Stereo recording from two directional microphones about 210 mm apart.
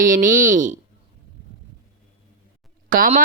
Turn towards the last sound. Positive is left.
turn(degrees=-40)  # may be behind; listen again after turning